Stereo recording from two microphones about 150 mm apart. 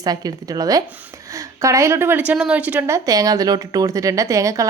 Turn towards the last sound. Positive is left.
turn(degrees=-20)  # may be behind; listen again after turning